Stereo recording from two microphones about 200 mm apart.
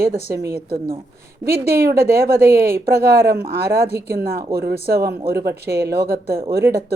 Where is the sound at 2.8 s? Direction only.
50° right (ahead or behind).